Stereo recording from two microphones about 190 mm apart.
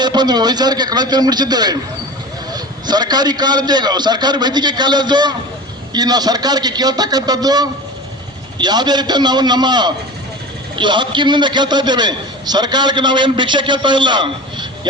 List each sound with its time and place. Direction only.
0.0 s a man's voice: 20° right (ahead or behind)